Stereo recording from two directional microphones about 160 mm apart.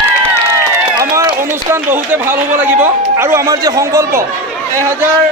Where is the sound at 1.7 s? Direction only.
15° right (ahead or behind).